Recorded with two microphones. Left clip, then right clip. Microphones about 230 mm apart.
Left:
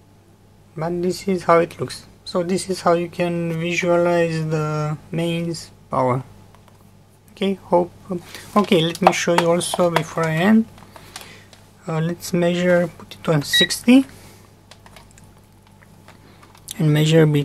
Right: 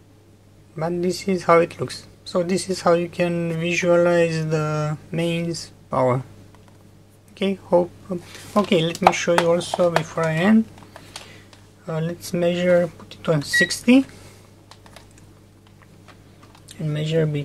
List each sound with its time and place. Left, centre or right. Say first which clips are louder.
0.7 s speech: left 1 dB; centre
7.3 s speech: left 1 dB; centre
11.8 s speech: left 2 dB; centre
16.6 s speech: left 9 dB; left